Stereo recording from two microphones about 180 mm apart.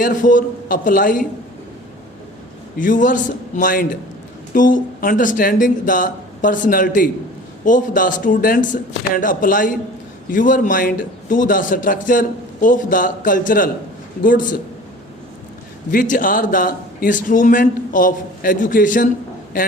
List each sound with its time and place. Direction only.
0.0 s a man's voice: 45° left (ahead or behind)
2.7 s a man's voice: 50° left (ahead or behind)
15.9 s a man's voice: 50° left (ahead or behind)